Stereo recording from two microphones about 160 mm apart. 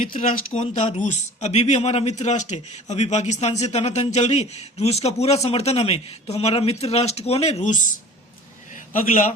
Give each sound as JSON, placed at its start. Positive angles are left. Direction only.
{"t": 0.0, "sound": "a man's voice", "side_deg": 55}
{"t": 8.9, "sound": "a man's voice", "side_deg": 55}